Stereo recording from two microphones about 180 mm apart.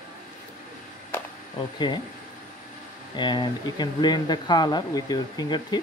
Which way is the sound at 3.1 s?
25° left (ahead or behind).